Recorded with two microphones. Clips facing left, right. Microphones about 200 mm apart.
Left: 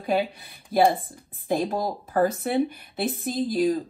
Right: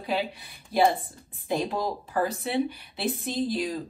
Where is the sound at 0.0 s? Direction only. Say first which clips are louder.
Left 4 dB; 50° left (ahead or behind).